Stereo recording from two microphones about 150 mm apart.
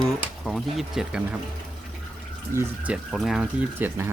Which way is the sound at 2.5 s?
15° right (ahead or behind).